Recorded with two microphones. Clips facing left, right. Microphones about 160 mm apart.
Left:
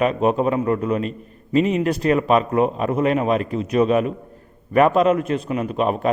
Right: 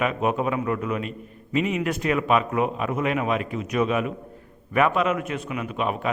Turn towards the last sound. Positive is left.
turn(degrees=40)  # may be behind; listen again after turning